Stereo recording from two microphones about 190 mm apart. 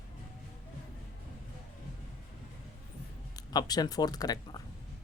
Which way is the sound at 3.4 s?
20° left (ahead or behind).